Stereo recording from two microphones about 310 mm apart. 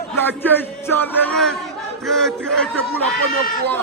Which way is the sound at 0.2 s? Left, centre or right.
Centre.